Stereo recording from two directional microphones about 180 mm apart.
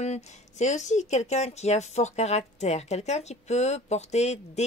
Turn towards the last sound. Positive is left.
turn(degrees=35)  # may be behind; listen again after turning